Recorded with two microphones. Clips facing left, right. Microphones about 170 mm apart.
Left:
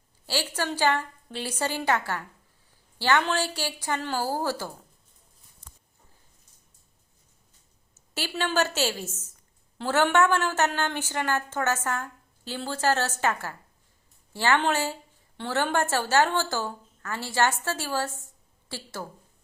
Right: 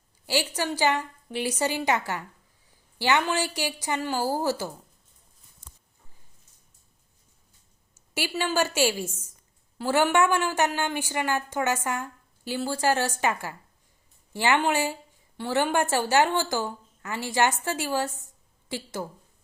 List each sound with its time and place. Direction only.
0.3 s a woman's voice: 15° right (ahead or behind)
8.1 s a woman's voice: 10° right (ahead or behind)